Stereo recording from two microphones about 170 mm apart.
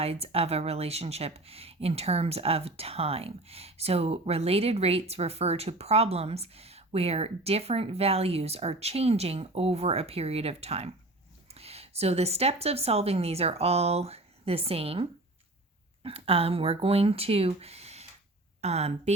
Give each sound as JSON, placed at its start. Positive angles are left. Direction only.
{"t": 0.0, "sound": "a woman's voice", "side_deg": -35}
{"t": 16.0, "sound": "speech", "side_deg": -35}